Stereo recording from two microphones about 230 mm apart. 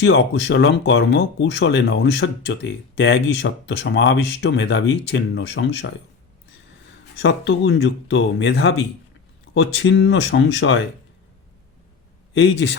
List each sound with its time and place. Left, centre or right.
0.0 s speech: left
7.2 s speech: left
12.3 s speech: left